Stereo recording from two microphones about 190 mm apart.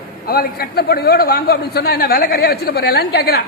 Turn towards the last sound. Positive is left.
turn(degrees=55)  # may be behind; listen again after turning